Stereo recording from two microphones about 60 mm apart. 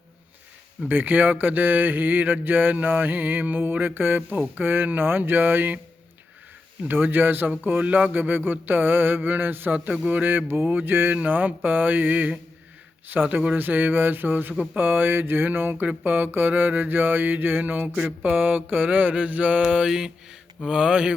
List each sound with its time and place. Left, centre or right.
0.9 s speech: right
6.8 s speech: right
11.2 s mantra: right
13.1 s speech: right
18.2 s mantra: right
19.6 s mantra: centre